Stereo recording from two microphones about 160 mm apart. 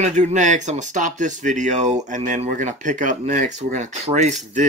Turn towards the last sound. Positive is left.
turn(degrees=-45)  # may be behind; listen again after turning